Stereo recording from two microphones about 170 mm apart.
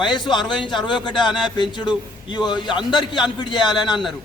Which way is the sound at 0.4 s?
5° right (ahead or behind).